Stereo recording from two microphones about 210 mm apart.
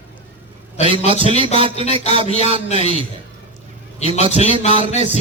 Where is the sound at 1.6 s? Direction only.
25° right (ahead or behind).